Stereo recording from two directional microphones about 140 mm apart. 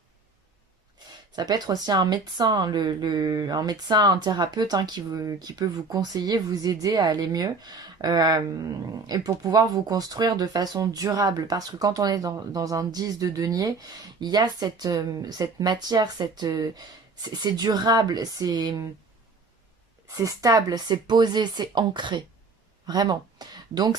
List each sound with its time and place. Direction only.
1.4 s speech: 30° right (ahead or behind)
20.1 s speech: 25° right (ahead or behind)